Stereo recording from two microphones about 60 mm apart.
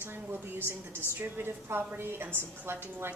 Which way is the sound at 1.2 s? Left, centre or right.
Right.